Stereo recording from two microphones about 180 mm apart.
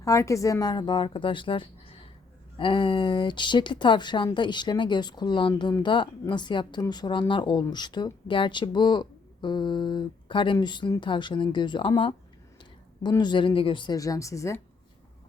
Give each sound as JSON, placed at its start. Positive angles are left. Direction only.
{"t": 0.0, "sound": "speech", "side_deg": 15}